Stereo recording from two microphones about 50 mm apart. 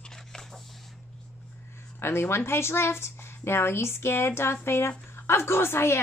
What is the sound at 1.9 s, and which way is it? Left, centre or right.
A woman's voice, left.